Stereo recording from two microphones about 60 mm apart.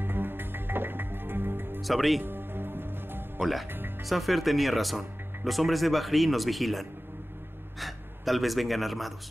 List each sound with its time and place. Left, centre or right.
0.0 s music: right
1.8 s speech: centre
2.2 s music: right
4.0 s speech: centre